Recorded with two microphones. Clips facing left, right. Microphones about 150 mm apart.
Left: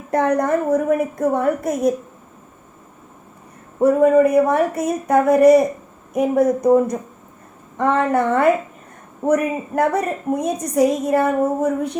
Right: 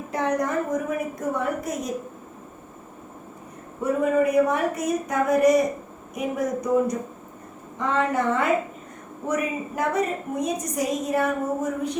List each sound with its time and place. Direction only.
0.1 s a woman's voice: 55° left (ahead or behind)
3.8 s a woman's voice: 50° left (ahead or behind)